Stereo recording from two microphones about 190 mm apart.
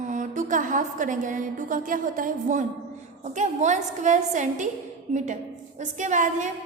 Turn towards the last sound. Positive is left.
turn(degrees=-40)  # may be behind; listen again after turning